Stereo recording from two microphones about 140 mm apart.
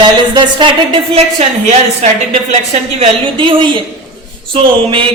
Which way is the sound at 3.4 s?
35° right (ahead or behind).